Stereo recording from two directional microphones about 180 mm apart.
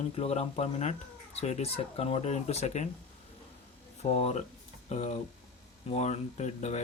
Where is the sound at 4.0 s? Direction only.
35° left (ahead or behind).